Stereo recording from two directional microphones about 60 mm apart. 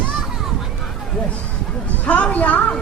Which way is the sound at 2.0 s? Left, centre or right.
Left.